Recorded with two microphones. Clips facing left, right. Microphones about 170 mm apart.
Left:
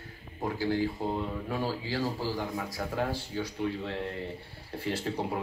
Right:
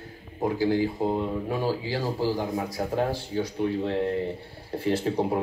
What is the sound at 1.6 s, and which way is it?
Speech, 45° right (ahead or behind).